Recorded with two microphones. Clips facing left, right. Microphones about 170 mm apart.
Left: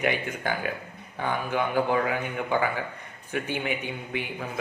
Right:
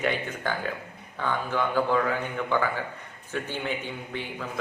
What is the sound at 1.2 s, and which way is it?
Speech, 15° left (ahead or behind).